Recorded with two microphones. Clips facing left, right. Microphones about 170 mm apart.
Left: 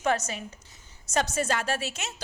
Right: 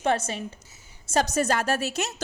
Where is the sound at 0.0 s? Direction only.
30° right (ahead or behind).